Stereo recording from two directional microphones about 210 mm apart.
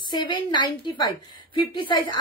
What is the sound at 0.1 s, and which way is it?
A woman's voice, 20° left (ahead or behind).